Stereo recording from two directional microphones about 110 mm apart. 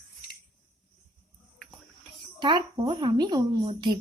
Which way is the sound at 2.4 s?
45° right (ahead or behind).